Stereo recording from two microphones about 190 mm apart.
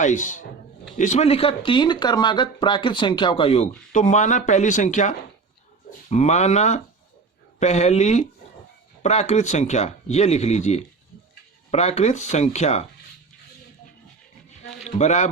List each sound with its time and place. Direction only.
0.0 s speech: 40° left (ahead or behind)
14.8 s speech: 35° left (ahead or behind)